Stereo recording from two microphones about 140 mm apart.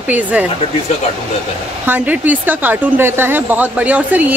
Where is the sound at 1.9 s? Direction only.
10° right (ahead or behind).